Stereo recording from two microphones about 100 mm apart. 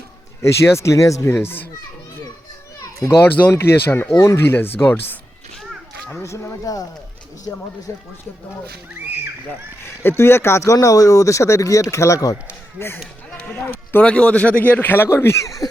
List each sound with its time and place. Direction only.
0.4 s speech: 30° left (ahead or behind)
3.2 s speech: 20° left (ahead or behind); by 7.6 s 40° left (ahead or behind)
7.9 s speech: 25° left (ahead or behind)
9.0 s speech: 20° right (ahead or behind)
9.8 s speech: 20° left (ahead or behind)
13.3 s a sound: 10° left (ahead or behind)
13.9 s speech: 10° left (ahead or behind); by 15.7 s 35° left (ahead or behind)